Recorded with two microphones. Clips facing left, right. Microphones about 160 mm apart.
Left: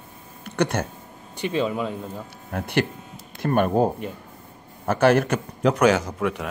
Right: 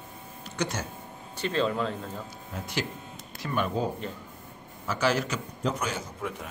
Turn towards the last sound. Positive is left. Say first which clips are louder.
# left 11 dB
turn(degrees=80)